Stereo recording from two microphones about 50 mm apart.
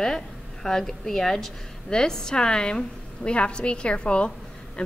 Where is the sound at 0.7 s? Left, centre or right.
Centre.